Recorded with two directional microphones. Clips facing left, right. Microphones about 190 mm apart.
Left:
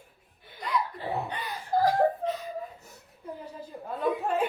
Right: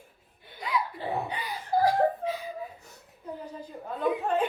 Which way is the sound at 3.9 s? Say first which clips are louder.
Right 1 dB; 5° left (ahead or behind).